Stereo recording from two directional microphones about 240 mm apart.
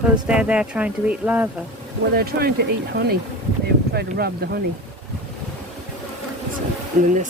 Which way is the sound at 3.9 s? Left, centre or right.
Right.